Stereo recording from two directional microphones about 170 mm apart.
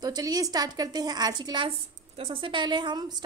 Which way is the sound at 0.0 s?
20° right (ahead or behind).